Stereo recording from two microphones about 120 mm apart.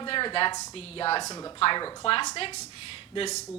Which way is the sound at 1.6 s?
40° left (ahead or behind).